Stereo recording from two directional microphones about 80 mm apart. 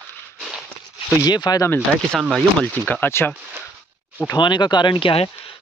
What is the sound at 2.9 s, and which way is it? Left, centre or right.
Speech, left.